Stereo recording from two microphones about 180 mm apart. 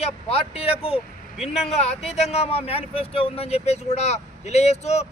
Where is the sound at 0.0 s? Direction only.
35° left (ahead or behind).